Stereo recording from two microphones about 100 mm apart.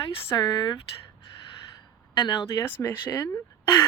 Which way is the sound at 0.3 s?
40° left (ahead or behind).